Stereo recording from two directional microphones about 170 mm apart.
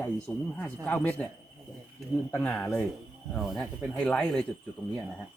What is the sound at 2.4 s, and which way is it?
Speech, 5° left (ahead or behind).